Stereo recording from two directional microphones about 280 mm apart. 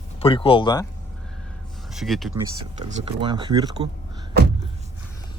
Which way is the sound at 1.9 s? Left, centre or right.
Centre.